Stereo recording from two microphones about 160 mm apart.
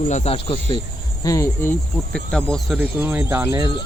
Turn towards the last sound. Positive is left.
turn(degrees=-15)  # may be behind; listen again after turning